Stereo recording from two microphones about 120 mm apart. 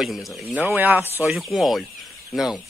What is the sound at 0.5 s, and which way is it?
Speech, 15° right (ahead or behind).